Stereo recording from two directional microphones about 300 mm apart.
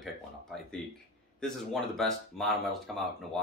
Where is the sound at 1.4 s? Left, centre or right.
Centre.